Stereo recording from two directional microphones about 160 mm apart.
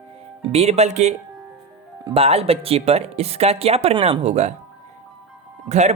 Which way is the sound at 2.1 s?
40° right (ahead or behind).